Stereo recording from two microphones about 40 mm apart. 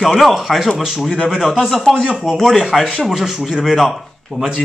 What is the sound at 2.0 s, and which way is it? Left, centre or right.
Speech, centre.